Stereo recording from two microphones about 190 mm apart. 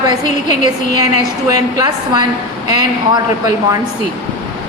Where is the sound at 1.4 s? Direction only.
20° right (ahead or behind).